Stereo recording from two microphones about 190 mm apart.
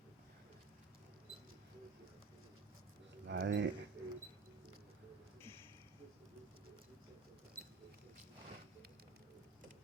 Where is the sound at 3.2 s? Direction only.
70° right (ahead or behind).